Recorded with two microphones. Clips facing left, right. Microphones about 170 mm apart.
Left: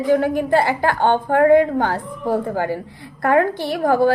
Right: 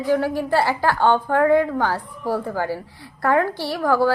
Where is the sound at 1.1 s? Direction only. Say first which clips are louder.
Left 5 dB; 55° left (ahead or behind).